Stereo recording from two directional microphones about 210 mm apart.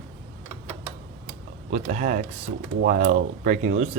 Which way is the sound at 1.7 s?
40° right (ahead or behind).